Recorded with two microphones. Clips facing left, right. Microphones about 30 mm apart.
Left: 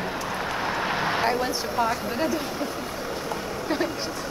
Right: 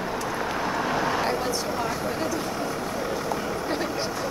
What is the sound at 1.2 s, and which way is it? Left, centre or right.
A woman's voice, left.